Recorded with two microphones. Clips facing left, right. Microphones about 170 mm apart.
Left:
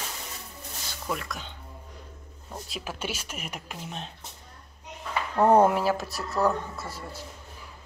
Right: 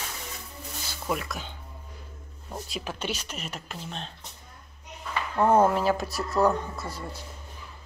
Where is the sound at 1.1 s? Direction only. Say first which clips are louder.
Right 3 dB; 5° right (ahead or behind).